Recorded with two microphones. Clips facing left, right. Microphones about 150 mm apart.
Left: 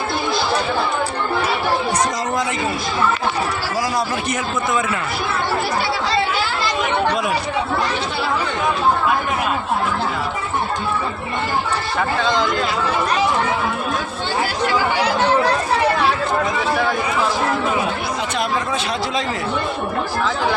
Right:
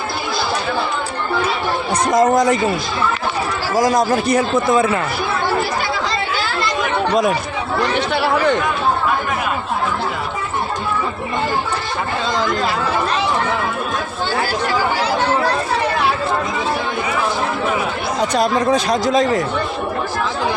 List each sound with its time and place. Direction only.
2.0 s speech: 50° right (ahead or behind)
3.8 s speech: 45° right (ahead or behind)
18.2 s speech: 40° right (ahead or behind)